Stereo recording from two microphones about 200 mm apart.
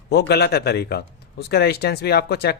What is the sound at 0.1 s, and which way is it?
A man's voice, 55° left (ahead or behind).